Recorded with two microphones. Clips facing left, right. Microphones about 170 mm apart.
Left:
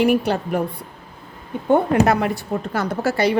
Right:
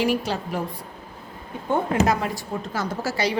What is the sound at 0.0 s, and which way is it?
Speech, 60° left (ahead or behind).